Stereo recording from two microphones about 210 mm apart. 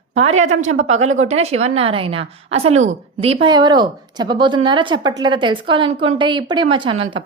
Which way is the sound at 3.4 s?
20° right (ahead or behind).